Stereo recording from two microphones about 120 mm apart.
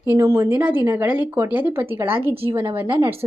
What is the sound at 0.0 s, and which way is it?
A woman's voice, 25° right (ahead or behind).